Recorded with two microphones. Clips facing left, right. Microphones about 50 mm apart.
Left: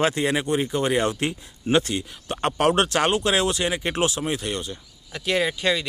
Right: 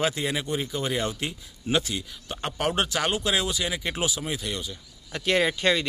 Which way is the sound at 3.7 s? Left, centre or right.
Left.